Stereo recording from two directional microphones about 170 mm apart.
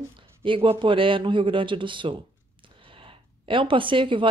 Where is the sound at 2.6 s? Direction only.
30° right (ahead or behind).